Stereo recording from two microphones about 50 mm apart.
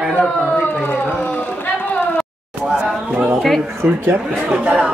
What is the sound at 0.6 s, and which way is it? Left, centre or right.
Run, left.